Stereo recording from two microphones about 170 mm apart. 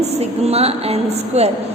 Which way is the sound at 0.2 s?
40° right (ahead or behind).